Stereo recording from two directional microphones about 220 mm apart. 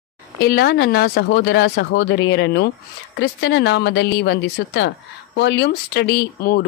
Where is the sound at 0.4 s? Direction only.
45° left (ahead or behind).